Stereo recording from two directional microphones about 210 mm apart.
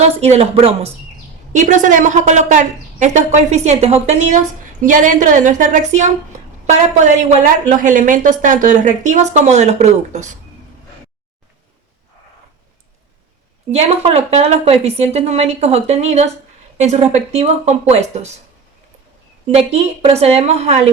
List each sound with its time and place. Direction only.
0.0 s a woman's voice: 30° right (ahead or behind)
13.7 s speech: 30° right (ahead or behind)
19.5 s a woman's voice: 30° right (ahead or behind)